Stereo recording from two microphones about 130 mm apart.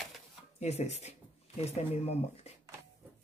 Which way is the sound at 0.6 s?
55° left (ahead or behind).